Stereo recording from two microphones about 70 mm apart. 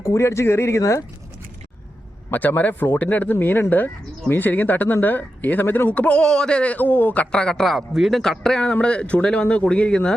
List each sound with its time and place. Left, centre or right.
0.0 s speech: left
2.3 s speech: left